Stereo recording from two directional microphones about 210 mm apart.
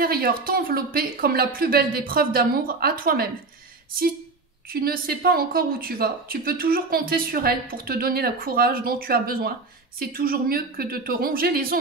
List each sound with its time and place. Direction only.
0.0 s speech: 45° right (ahead or behind)
4.6 s speech: 45° right (ahead or behind)